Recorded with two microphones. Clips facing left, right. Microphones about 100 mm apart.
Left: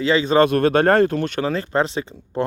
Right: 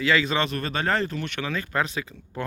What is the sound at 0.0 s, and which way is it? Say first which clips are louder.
Speech: left 4 dB; 30° left (ahead or behind).